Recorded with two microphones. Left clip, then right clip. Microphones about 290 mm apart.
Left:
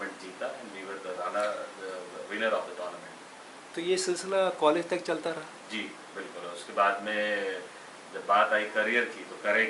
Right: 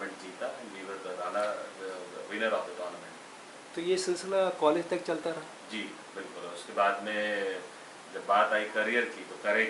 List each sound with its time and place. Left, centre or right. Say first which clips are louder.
1.2 s a sound: left 1 dB; centre
3.8 s a man's voice: left 1 dB; centre
5.1 s speech: left 1 dB; centre
6.7 s a man's voice: left 2 dB; centre